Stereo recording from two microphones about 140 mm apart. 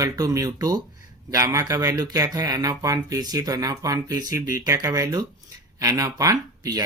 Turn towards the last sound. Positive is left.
turn(degrees=-25)  # may be behind; listen again after turning